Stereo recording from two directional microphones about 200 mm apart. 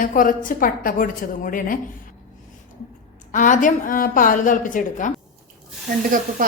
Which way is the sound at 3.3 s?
40° left (ahead or behind).